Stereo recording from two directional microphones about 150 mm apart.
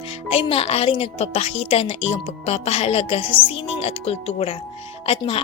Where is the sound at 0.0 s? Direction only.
40° left (ahead or behind).